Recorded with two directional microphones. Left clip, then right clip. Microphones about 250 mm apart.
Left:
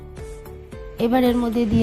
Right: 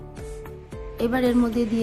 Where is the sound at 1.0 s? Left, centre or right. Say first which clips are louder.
Left 3 dB; left.